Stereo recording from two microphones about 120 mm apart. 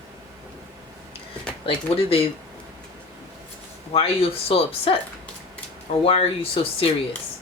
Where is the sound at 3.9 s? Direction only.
55° left (ahead or behind).